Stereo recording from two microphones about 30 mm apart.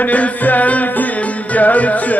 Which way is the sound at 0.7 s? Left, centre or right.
Left.